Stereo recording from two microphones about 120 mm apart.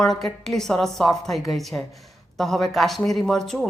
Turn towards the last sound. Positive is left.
turn(degrees=5)  # may be behind; listen again after turning